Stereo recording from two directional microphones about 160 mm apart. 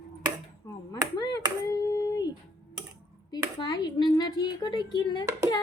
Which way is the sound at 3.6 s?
25° left (ahead or behind).